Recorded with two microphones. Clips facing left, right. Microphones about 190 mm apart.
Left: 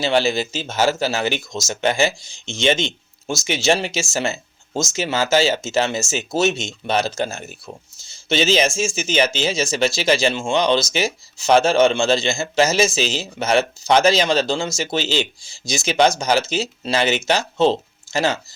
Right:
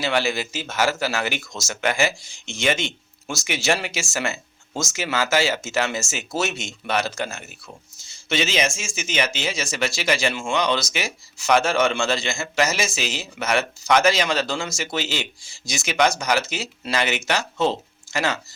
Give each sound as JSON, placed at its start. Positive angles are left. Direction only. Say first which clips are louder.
{"t": 0.0, "sound": "speech", "louder": "left 4 dB", "side_deg": 25}